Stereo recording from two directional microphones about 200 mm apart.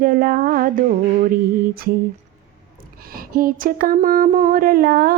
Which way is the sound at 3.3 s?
45° right (ahead or behind).